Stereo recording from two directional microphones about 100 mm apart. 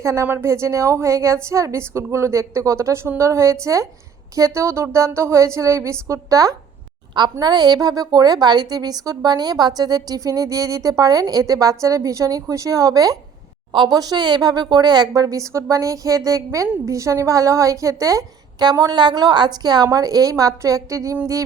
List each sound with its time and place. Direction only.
0.0 s a woman's voice: 30° right (ahead or behind)